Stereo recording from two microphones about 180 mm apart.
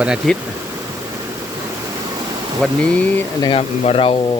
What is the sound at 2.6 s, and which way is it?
Speech, 5° left (ahead or behind).